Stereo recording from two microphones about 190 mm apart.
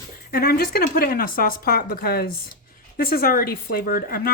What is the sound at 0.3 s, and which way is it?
A woman's voice, 50° left (ahead or behind).